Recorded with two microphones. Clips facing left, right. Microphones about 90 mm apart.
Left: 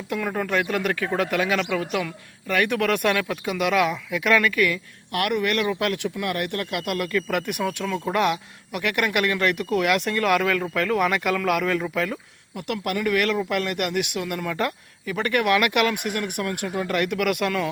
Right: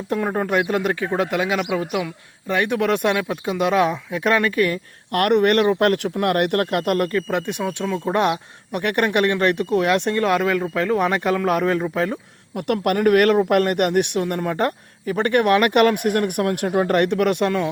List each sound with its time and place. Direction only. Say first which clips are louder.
0.1 s a man's voice: right 4 dB; 30° right (ahead or behind); by 2.1 s 15° right (ahead or behind)
2.5 s speech: right 2 dB; 25° right (ahead or behind)
8.0 s speech: right 3 dB; 35° right (ahead or behind)
12.5 s speech: right 7 dB; 50° right (ahead or behind); by 17.7 s 30° right (ahead or behind)